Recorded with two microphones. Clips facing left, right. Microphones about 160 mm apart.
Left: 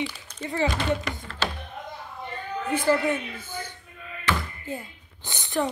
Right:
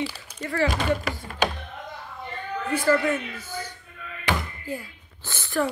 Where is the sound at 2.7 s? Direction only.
20° left (ahead or behind).